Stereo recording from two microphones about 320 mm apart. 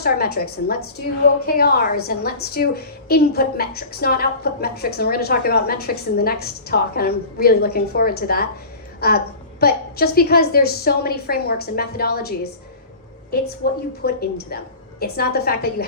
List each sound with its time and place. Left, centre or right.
0.0 s a woman's voice: left
13.6 s a woman's voice: left